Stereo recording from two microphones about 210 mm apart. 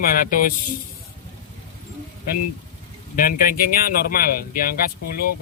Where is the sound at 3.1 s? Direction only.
45° left (ahead or behind).